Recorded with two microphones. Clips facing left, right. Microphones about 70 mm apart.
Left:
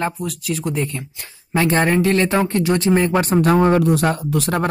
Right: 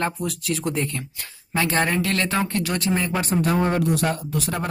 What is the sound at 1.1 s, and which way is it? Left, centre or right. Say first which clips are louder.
Speech: left 5 dB; centre.